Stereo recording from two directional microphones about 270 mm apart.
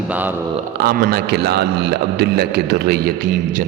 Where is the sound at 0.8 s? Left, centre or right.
Right.